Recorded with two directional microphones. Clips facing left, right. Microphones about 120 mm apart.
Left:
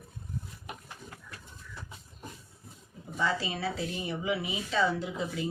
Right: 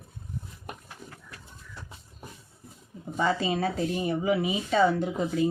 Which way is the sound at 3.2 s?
50° right (ahead or behind).